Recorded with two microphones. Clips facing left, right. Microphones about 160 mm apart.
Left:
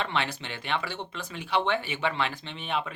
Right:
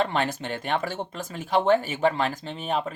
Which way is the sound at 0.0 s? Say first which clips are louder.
Right 5 dB; 45° right (ahead or behind).